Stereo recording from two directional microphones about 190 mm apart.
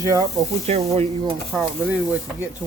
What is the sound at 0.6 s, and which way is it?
Speech, 35° right (ahead or behind).